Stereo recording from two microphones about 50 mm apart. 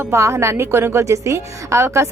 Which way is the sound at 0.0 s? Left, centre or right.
Right.